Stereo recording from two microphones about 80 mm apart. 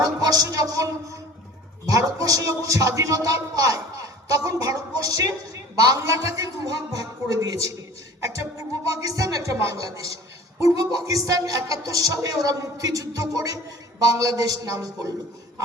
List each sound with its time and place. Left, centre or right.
0.0 s a man's voice: right